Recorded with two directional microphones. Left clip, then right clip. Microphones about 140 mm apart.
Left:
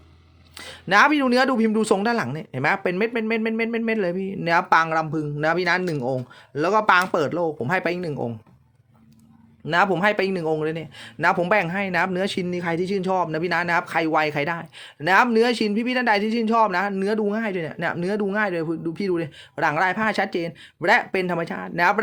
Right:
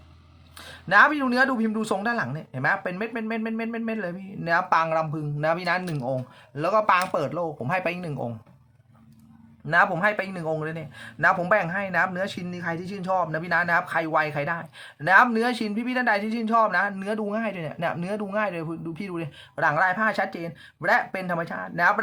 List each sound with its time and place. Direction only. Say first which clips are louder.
0.5 s a man's voice: left 1 dB; 45° left (ahead or behind)
9.6 s a man's voice: left 1 dB; 40° left (ahead or behind)